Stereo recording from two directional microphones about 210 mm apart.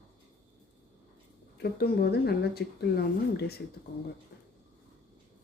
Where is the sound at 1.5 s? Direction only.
50° left (ahead or behind).